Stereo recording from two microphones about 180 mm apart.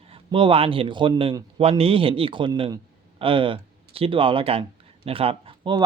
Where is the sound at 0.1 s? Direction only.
30° right (ahead or behind).